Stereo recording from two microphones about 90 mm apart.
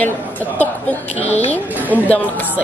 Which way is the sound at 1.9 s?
20° left (ahead or behind).